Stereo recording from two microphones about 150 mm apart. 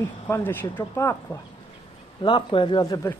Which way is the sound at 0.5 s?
15° left (ahead or behind).